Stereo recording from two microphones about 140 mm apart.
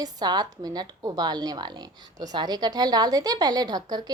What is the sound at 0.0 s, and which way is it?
A woman's voice, 30° right (ahead or behind).